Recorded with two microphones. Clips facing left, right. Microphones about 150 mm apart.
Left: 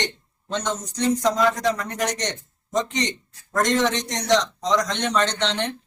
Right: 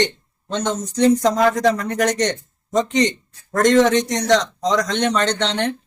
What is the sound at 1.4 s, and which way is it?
Speech, 55° right (ahead or behind).